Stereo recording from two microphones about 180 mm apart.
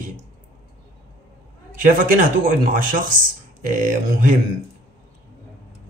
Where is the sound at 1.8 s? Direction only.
50° right (ahead or behind).